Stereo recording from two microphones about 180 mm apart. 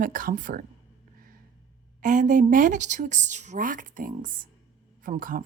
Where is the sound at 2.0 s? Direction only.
45° right (ahead or behind).